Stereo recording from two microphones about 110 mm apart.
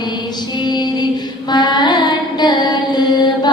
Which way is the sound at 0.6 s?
40° left (ahead or behind).